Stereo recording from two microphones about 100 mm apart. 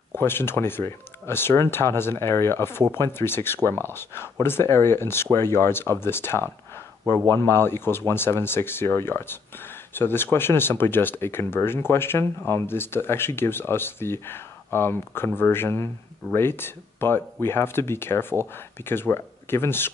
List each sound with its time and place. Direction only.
0.1 s speech: 25° left (ahead or behind)